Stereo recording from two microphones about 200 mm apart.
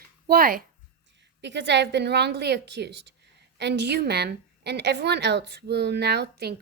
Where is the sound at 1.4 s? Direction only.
60° right (ahead or behind).